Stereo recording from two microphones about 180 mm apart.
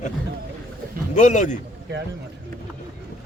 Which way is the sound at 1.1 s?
45° left (ahead or behind).